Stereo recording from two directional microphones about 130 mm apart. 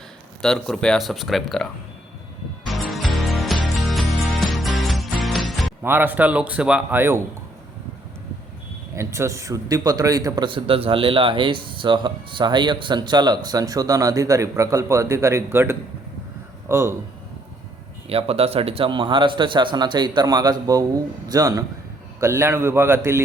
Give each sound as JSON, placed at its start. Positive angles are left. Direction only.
{"t": 0.4, "sound": "speech", "side_deg": 5}
{"t": 2.6, "sound": "music", "side_deg": 0}
{"t": 5.8, "sound": "speech", "side_deg": -15}
{"t": 9.0, "sound": "a man's voice", "side_deg": -20}
{"t": 18.1, "sound": "a man's voice", "side_deg": -50}